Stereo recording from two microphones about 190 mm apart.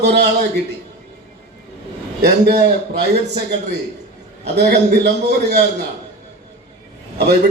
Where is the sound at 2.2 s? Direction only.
60° right (ahead or behind).